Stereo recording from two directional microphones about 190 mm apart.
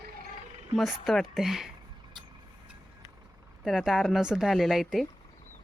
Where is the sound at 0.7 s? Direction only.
Centre (ahead or behind).